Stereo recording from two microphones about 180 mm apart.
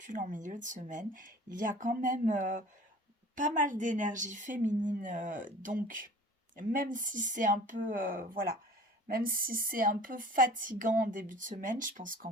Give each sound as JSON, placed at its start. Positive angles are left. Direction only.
{"t": 0.0, "sound": "a woman's voice", "side_deg": -45}